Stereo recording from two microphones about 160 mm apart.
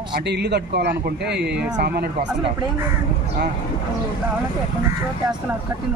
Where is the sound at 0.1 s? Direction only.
90° right.